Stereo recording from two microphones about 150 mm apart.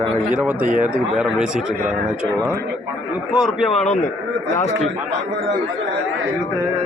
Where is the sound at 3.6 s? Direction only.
45° left (ahead or behind).